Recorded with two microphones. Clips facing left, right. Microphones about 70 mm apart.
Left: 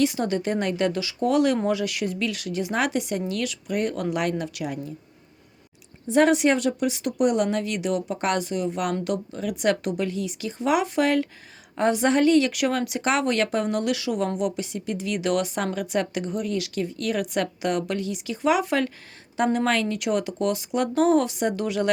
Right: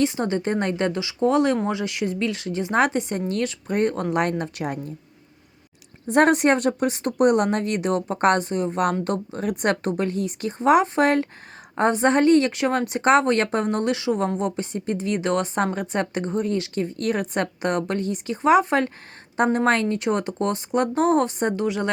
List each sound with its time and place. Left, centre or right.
0.0 s speech: right
6.1 s speech: right
21.6 s speech: right